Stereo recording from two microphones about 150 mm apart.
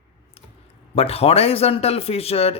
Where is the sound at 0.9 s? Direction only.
40° left (ahead or behind).